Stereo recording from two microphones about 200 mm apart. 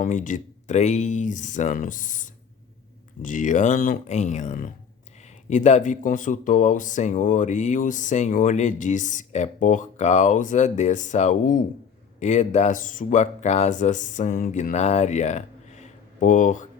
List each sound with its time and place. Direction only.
0.0 s speech: 40° left (ahead or behind)